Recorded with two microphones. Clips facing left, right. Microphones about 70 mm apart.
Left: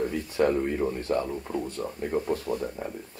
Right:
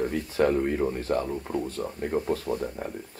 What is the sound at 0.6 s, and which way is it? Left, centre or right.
Speech, centre.